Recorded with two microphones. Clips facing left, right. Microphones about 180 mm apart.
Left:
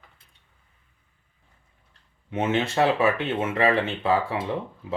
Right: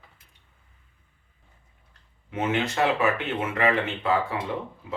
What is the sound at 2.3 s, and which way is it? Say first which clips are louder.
Speech: left 2 dB; 25° left (ahead or behind).